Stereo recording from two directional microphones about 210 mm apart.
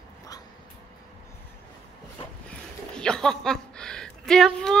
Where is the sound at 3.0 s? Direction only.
5° left (ahead or behind).